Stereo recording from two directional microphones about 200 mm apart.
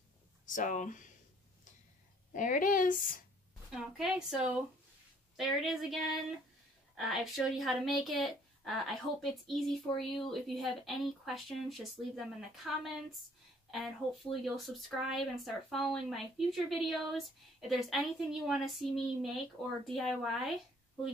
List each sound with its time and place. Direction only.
0.5 s speech: 40° left (ahead or behind)
2.3 s speech: 40° left (ahead or behind)
3.7 s a woman's voice: centre (ahead or behind)
7.0 s a woman's voice: centre (ahead or behind)